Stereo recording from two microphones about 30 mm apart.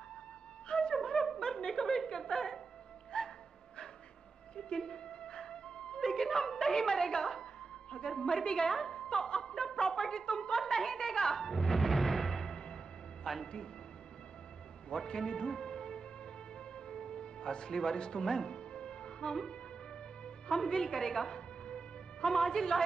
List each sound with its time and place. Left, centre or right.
0.7 s wind instrument: left
1.4 s a sound: left
3.1 s music: left
4.7 s music: left
5.9 s music: centre
8.0 s a woman's voice: left
8.4 s a woman's voice: centre
8.8 s music: left
9.6 s a sound: left
10.8 s music: centre
14.9 s a man's voice: left
16.5 s music: left
21.4 s music: left
22.3 s a woman's voice: centre